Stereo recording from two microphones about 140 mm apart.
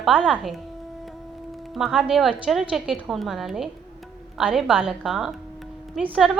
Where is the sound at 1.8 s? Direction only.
Centre (ahead or behind).